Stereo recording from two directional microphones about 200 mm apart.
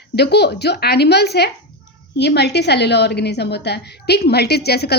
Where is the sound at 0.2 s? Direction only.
55° left (ahead or behind).